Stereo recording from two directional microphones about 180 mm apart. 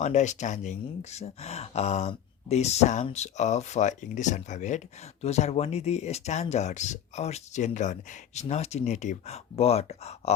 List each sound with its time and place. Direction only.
0.0 s speech: 40° left (ahead or behind)